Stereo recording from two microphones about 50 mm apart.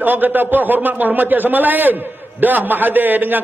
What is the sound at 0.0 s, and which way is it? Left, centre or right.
A man's voice, right.